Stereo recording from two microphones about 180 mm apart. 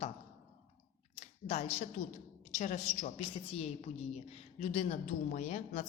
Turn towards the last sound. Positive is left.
turn(degrees=40)  # may be behind; listen again after turning